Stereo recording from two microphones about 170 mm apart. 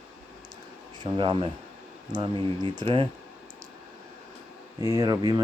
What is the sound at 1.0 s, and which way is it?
Mantra, 30° right (ahead or behind).